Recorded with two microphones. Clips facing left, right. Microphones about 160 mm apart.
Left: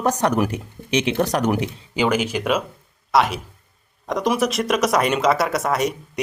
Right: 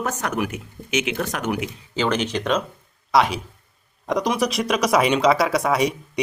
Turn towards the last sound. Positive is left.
turn(degrees=0)  # may be behind; listen again after turning